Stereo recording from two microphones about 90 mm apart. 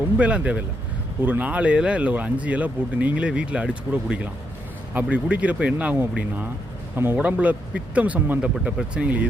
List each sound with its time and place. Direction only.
0.2 s speech: 15° right (ahead or behind)